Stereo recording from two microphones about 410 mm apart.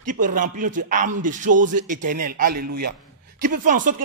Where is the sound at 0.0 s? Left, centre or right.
Centre.